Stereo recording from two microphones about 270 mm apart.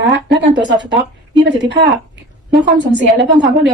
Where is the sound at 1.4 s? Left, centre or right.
Right.